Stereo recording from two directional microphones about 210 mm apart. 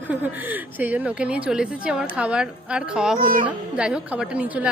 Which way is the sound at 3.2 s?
40° right (ahead or behind).